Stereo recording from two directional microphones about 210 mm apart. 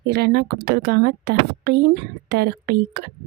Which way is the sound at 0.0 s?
50° right (ahead or behind).